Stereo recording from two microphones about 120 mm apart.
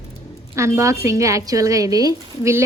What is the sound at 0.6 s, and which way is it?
A woman's voice, 25° right (ahead or behind).